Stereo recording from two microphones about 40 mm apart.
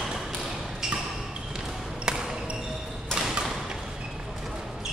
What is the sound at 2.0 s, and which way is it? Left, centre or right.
Basketball bounce, centre.